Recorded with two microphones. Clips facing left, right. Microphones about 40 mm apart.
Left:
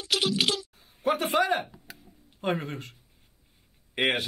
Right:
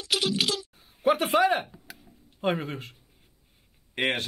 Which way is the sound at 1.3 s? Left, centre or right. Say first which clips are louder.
Right 2 dB; centre.